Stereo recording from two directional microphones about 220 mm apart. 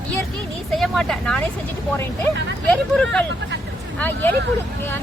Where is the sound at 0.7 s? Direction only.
Centre (ahead or behind).